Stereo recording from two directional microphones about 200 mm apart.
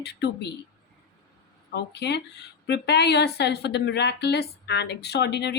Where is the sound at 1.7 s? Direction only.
55° left (ahead or behind).